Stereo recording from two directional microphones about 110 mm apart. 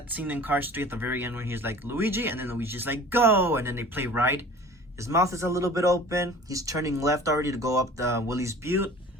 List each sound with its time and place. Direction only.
0.1 s speech: 15° right (ahead or behind)